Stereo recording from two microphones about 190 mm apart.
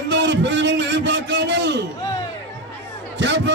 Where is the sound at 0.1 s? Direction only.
70° right (ahead or behind).